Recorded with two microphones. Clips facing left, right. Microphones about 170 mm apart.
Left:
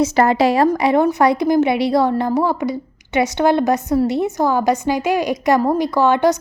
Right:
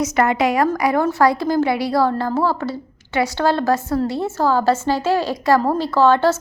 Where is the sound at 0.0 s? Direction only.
30° left (ahead or behind).